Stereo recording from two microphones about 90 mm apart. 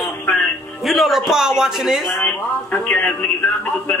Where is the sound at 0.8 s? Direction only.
Centre (ahead or behind).